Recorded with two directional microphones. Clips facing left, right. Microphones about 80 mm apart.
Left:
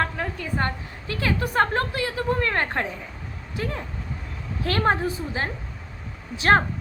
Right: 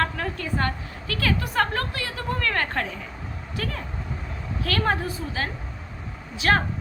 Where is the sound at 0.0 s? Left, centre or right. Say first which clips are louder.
Even; centre.